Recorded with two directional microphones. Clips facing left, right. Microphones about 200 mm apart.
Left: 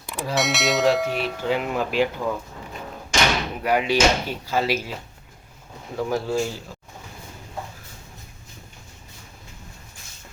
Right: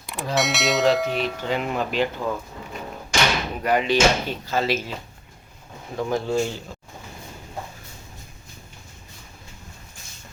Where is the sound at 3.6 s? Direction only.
10° left (ahead or behind).